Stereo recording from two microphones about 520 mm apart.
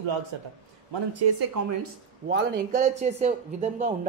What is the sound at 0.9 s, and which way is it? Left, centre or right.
Speech, right.